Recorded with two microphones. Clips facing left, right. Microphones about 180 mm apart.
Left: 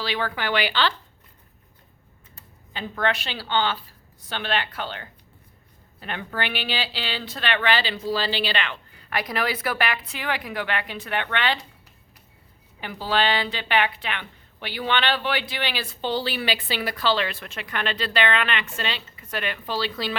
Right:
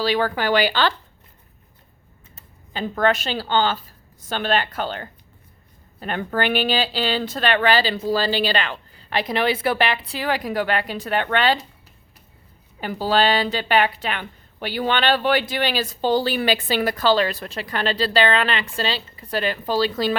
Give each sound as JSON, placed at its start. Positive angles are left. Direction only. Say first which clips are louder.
{"t": 0.0, "sound": "a woman's voice", "louder": "right 7 dB", "side_deg": -40}
{"t": 2.7, "sound": "a woman's voice", "louder": "right 6 dB", "side_deg": -40}
{"t": 12.8, "sound": "a woman's voice", "louder": "right 5 dB", "side_deg": -40}